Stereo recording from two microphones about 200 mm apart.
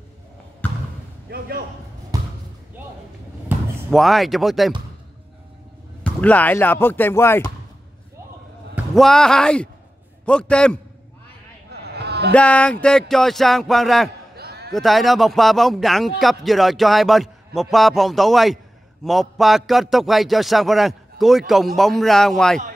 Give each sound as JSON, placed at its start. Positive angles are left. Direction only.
{"t": 1.3, "sound": "a sound", "side_deg": -50}
{"t": 2.1, "sound": "basketball bounce", "side_deg": -20}
{"t": 3.4, "sound": "speech", "side_deg": 0}
{"t": 6.0, "sound": "speech", "side_deg": 5}
{"t": 8.7, "sound": "speech", "side_deg": 0}
{"t": 11.7, "sound": "a sound", "side_deg": -55}
{"t": 12.4, "sound": "speech", "side_deg": 5}
{"t": 14.3, "sound": "basketball bounce", "side_deg": -50}
{"t": 14.7, "sound": "speech", "side_deg": 0}